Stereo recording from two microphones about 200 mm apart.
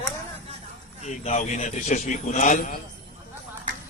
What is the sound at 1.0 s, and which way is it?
A man's voice, 35° left (ahead or behind).